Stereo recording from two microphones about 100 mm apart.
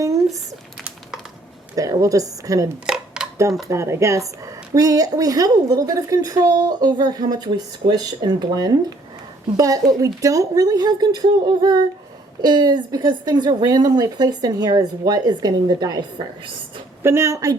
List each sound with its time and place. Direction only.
1.7 s a woman's voice: 35° right (ahead or behind)
2.8 s dishes: 10° right (ahead or behind)
3.7 s a woman's voice: 30° right (ahead or behind)
17.0 s a woman's voice: 25° right (ahead or behind)